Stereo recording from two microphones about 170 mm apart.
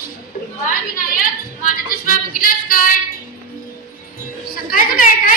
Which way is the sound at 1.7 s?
55° left (ahead or behind).